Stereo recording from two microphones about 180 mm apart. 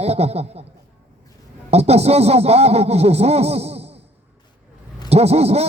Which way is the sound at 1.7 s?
35° right (ahead or behind).